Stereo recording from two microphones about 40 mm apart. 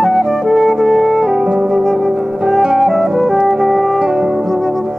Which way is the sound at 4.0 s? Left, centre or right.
Centre.